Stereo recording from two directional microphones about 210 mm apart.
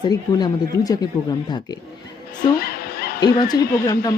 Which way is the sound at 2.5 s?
45° left (ahead or behind).